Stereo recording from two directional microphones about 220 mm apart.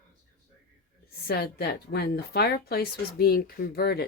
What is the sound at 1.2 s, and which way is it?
A woman's voice, 45° left (ahead or behind).